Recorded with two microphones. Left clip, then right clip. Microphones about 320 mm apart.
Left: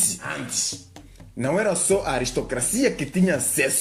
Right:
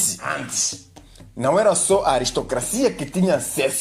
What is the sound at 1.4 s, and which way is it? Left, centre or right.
Speech, right.